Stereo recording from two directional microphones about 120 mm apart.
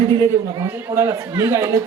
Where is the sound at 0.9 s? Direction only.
25° right (ahead or behind).